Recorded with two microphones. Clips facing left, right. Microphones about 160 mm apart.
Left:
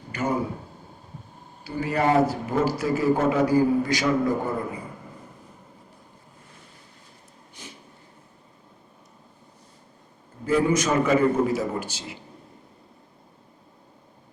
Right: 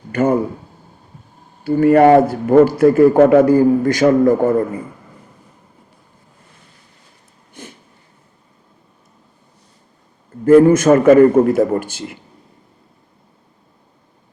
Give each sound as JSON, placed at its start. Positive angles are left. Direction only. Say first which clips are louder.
{"t": 0.1, "sound": "a man's voice", "louder": "right 11 dB", "side_deg": -55}
{"t": 1.6, "sound": "a man's voice", "louder": "right 14 dB", "side_deg": -55}
{"t": 7.6, "sound": "a sound", "louder": "right 8 dB", "side_deg": -55}
{"t": 10.4, "sound": "a man's voice", "louder": "right 13 dB", "side_deg": -55}